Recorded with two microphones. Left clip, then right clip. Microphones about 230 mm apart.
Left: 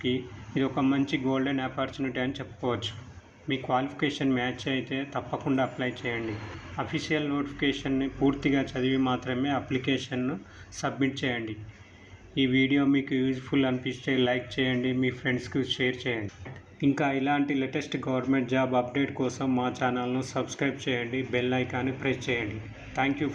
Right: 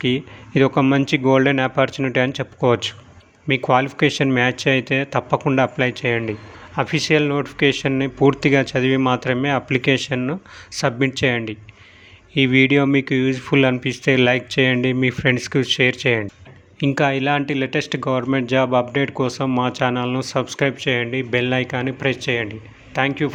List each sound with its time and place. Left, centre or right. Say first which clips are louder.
0.0 s speech: right 9 dB; right